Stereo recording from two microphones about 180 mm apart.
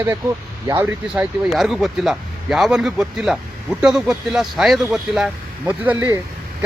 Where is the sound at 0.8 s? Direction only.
10° right (ahead or behind).